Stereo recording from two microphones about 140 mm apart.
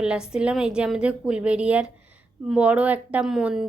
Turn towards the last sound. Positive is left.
turn(degrees=-5)  # may be behind; listen again after turning